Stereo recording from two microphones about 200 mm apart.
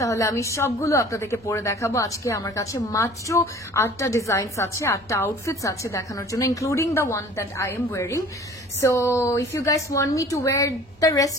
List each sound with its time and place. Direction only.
0.0 s a woman's voice: 15° left (ahead or behind)